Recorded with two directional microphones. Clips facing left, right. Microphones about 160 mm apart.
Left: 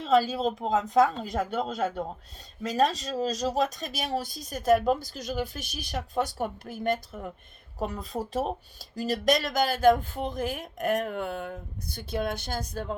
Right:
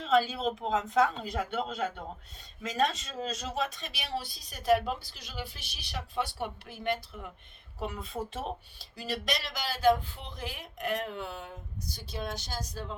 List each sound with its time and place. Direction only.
0.1 s speech: 40° left (ahead or behind); by 13.0 s 55° left (ahead or behind)